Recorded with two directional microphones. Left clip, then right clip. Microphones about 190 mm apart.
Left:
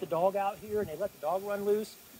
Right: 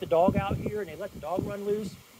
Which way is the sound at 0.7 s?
40° right (ahead or behind).